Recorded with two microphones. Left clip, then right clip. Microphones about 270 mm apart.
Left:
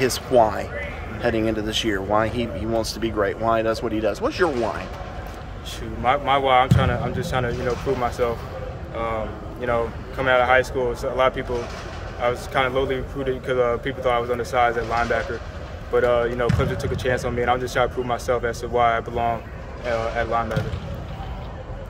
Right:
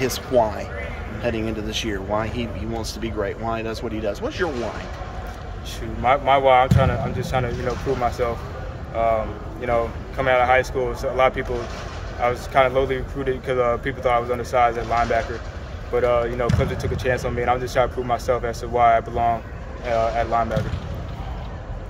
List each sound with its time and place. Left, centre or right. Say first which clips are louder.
0.4 s speech: left 2 dB; centre
6.0 s speech: right 3 dB; centre